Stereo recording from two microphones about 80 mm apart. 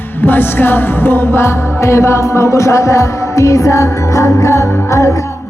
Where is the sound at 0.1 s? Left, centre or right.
Left.